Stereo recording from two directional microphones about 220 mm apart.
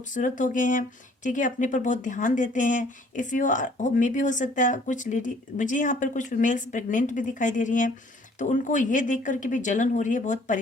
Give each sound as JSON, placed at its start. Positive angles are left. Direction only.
{"t": 0.1, "sound": "speech", "side_deg": 35}